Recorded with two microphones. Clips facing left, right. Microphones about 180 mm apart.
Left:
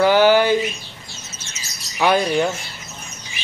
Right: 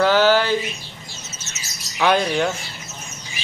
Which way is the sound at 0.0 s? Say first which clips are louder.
Left 2 dB; 15° left (ahead or behind).